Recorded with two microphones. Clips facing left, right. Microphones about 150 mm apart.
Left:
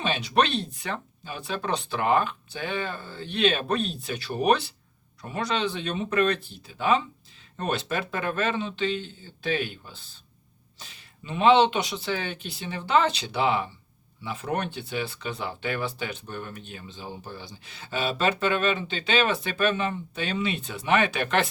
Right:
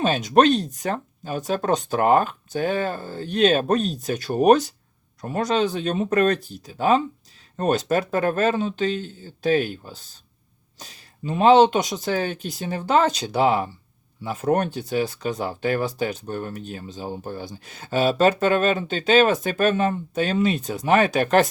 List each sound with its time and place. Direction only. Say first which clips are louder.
0.0 s speech: right 7 dB; 45° right (ahead or behind)